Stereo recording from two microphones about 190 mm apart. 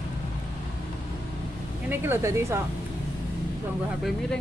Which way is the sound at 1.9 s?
10° right (ahead or behind).